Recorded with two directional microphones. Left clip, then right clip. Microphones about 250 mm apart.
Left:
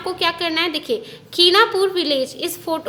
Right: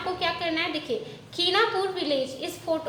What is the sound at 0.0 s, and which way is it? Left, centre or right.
A woman's voice, left.